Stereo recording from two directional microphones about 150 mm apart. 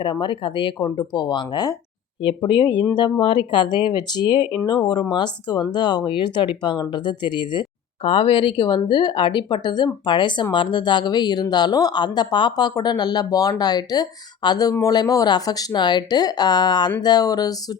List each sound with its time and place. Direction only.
0.0 s speech: 35° left (ahead or behind)